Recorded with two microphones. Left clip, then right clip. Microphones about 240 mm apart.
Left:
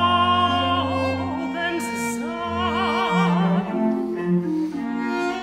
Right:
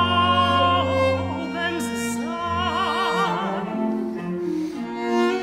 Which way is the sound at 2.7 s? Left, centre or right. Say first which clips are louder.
Left 1 dB; centre.